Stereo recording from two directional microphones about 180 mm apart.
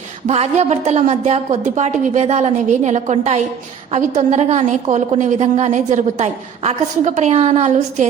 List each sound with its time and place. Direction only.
0.3 s a woman's voice: 40° right (ahead or behind)